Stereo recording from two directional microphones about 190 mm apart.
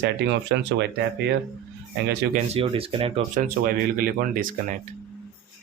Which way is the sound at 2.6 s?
30° right (ahead or behind).